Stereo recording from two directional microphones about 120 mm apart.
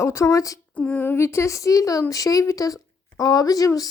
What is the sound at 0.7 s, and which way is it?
Speech, 15° left (ahead or behind).